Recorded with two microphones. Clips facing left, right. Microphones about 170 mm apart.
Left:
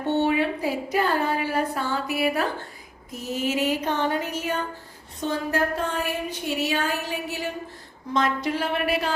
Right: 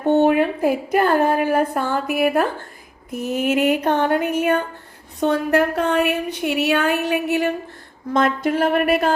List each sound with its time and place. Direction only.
0.1 s a woman's voice: 50° right (ahead or behind)
3.1 s a sound: 55° right (ahead or behind)
5.2 s a woman's voice: 65° right (ahead or behind)
8.1 s a woman's voice: 50° right (ahead or behind)